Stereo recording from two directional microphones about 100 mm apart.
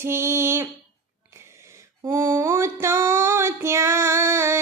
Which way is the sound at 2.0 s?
25° right (ahead or behind).